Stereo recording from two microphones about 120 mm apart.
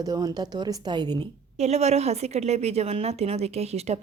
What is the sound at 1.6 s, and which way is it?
A woman's voice, 65° right (ahead or behind).